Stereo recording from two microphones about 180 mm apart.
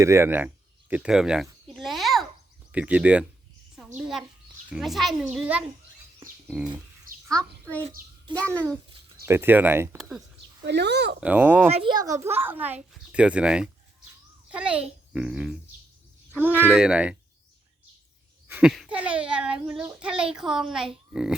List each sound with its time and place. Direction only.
0.0 s a sound: 15° right (ahead or behind)
2.7 s a child's voice: 5° right (ahead or behind)
7.3 s a child's voice: 5° left (ahead or behind)
9.2 s a child's voice: 15° right (ahead or behind)
10.0 s speech: centre (ahead or behind)
10.6 s a child's voice: 70° right (ahead or behind)
11.2 s a child's voice: 10° right (ahead or behind)
11.7 s a child's voice: 25° right (ahead or behind); by 17.2 s 5° right (ahead or behind)
18.4 s speech: 5° right (ahead or behind)